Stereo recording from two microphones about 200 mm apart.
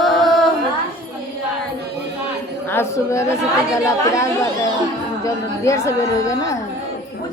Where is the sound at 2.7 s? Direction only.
15° left (ahead or behind).